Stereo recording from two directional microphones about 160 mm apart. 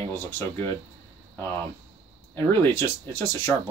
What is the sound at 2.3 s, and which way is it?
Speech, 15° left (ahead or behind).